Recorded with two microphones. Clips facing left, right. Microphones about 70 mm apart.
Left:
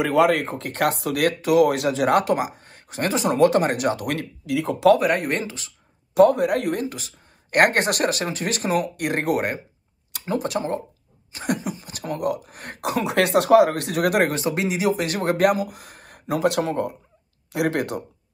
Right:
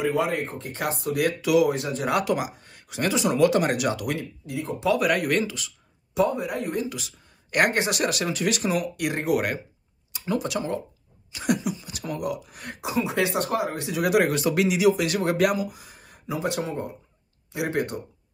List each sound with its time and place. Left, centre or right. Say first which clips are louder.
0.0 s speech: left 6 dB; left
1.4 s speech: left 3 dB; left
1.7 s speech: left 5 dB; left
2.0 s speech: left 3 dB; left
4.1 s speech: left 5 dB; left
4.9 s speech: left 1 dB; left
6.1 s speech: left 8 dB; left
7.6 s speech: left 4 dB; left
10.2 s speech: left 2 dB; left
12.8 s speech: left 4 dB; left
14.3 s speech: right 1 dB; left